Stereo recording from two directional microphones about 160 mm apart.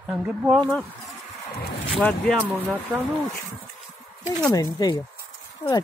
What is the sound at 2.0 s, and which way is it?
Speech, 5° left (ahead or behind).